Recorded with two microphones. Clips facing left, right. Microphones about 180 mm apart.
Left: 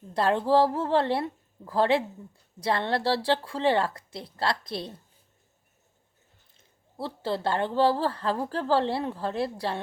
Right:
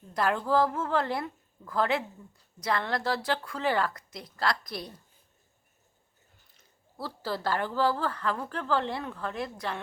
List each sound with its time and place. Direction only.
0.1 s a woman's voice: 30° left (ahead or behind)
6.6 s speech: 25° left (ahead or behind)